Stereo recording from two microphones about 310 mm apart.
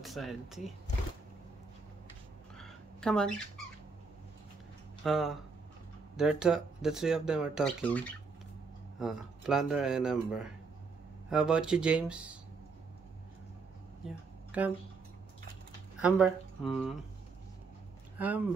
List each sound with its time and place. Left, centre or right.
0.0 s speech: centre
2.5 s a sound: centre
5.0 s speech: centre
9.0 s speech: centre
14.5 s speech: centre
16.0 s speech: centre
18.1 s a sound: centre